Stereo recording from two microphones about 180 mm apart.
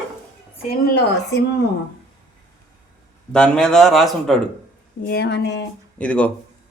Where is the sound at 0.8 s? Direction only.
65° left (ahead or behind).